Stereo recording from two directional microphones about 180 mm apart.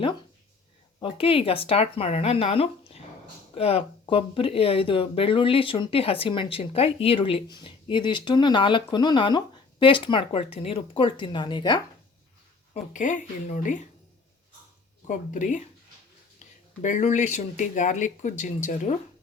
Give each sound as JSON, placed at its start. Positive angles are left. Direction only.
{"t": 0.9, "sound": "speech", "side_deg": 30}
{"t": 12.7, "sound": "speech", "side_deg": 45}
{"t": 15.0, "sound": "speech", "side_deg": 45}
{"t": 16.8, "sound": "speech", "side_deg": 45}